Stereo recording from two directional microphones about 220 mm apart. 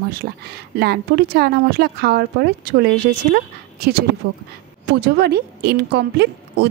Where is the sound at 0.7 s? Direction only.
45° right (ahead or behind).